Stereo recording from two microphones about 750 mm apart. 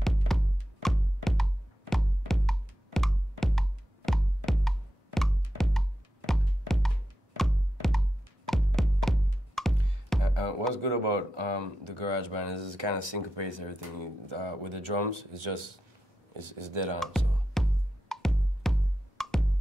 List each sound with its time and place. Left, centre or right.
0.0 s music: centre
10.7 s speech: right
17.6 s music: centre